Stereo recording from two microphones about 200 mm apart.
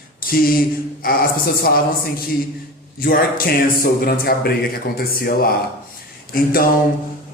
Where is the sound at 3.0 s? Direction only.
45° left (ahead or behind).